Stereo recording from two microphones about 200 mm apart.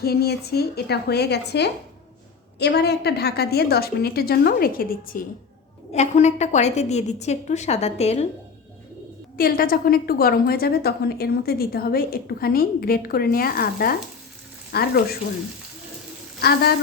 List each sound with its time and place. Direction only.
0.0 s a woman's voice: 50° left (ahead or behind)
5.9 s a woman's voice: 35° left (ahead or behind)
9.4 s a woman's voice: 45° left (ahead or behind)
16.4 s a woman's voice: 50° left (ahead or behind)